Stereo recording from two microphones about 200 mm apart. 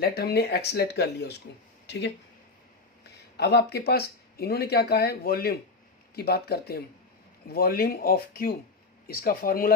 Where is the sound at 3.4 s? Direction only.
55° left (ahead or behind).